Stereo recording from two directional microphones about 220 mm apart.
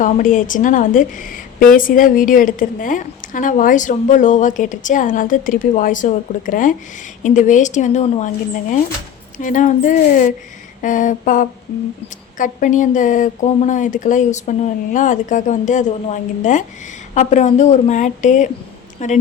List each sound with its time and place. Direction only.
0.0 s a woman's voice: 35° left (ahead or behind)
9.4 s a woman's voice: 35° left (ahead or behind)